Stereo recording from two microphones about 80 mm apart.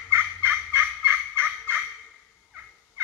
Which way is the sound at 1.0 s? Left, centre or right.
Right.